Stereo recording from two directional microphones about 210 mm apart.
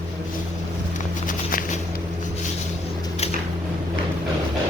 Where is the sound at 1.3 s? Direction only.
40° left (ahead or behind).